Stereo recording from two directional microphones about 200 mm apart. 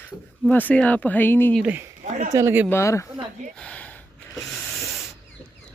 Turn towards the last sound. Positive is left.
turn(degrees=5)  # may be behind; listen again after turning